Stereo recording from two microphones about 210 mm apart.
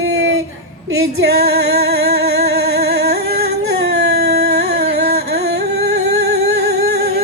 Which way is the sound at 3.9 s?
50° right (ahead or behind).